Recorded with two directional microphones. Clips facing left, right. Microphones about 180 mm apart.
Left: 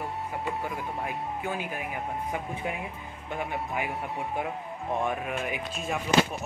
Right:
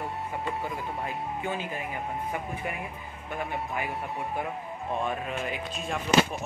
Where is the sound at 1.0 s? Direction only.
10° left (ahead or behind).